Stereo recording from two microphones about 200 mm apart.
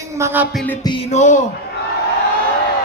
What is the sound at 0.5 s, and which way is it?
Music, 5° left (ahead or behind).